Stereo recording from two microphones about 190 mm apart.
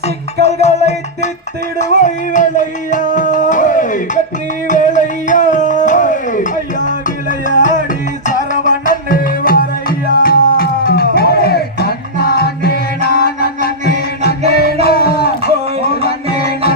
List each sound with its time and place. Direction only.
0.4 s music: 35° left (ahead or behind); by 16.6 s 55° left (ahead or behind)